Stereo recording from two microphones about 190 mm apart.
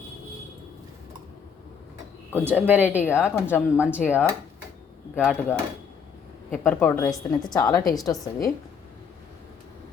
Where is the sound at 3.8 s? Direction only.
5° right (ahead or behind).